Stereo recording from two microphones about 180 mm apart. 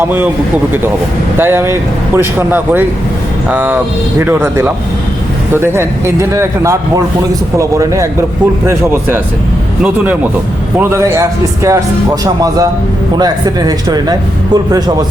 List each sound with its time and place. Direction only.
0.0 s speech: 10° right (ahead or behind)
1.4 s speech: 15° right (ahead or behind)